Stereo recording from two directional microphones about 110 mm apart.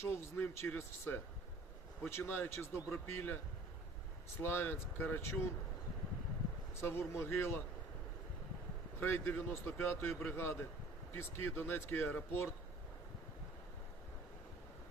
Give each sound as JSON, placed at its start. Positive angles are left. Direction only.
{"t": 0.0, "sound": "speech", "side_deg": 20}
{"t": 4.4, "sound": "speech", "side_deg": 20}
{"t": 6.8, "sound": "speech", "side_deg": 20}
{"t": 9.0, "sound": "speech", "side_deg": 20}